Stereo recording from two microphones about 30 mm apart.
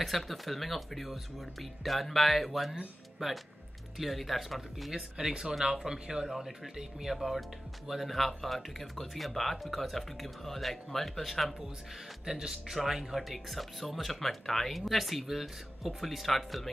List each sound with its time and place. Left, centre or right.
0.0 s speech: centre
3.2 s speech: centre
4.0 s speech: centre
4.9 s speech: centre
6.2 s speech: centre
8.2 s speech: centre
12.3 s speech: centre